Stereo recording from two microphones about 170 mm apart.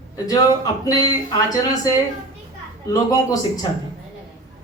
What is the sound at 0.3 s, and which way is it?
A man's voice, 20° left (ahead or behind).